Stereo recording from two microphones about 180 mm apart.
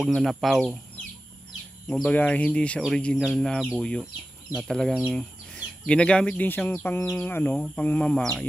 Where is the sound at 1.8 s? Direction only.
5° left (ahead or behind).